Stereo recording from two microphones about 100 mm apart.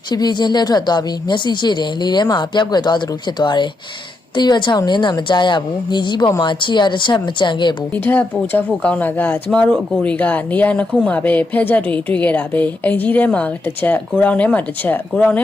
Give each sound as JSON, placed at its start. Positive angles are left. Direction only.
{"t": 0.1, "sound": "speech", "side_deg": 45}
{"t": 7.9, "sound": "speech", "side_deg": 20}